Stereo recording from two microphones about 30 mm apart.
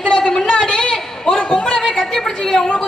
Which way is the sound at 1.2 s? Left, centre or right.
Centre.